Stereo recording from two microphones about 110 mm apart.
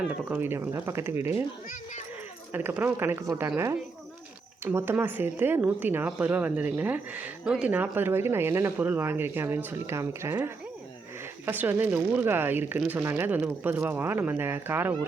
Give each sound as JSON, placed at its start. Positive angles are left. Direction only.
{"t": 0.0, "sound": "speech", "side_deg": -15}
{"t": 2.5, "sound": "speech", "side_deg": -20}
{"t": 3.2, "sound": "a woman's voice", "side_deg": -30}
{"t": 4.6, "sound": "speech", "side_deg": -20}